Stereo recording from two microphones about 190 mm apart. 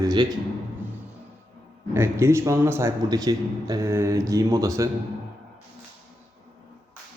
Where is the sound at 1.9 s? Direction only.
15° right (ahead or behind).